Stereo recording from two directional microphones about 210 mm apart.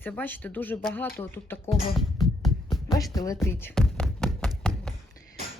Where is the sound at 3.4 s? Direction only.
10° left (ahead or behind).